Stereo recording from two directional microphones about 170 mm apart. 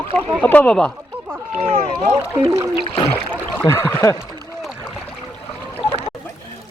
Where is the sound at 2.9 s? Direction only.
35° left (ahead or behind).